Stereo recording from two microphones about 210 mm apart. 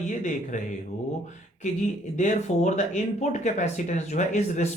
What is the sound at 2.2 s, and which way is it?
Speech, 35° left (ahead or behind).